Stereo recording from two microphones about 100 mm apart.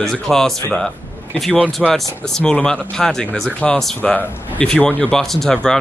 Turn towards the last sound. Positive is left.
turn(degrees=5)  # may be behind; listen again after turning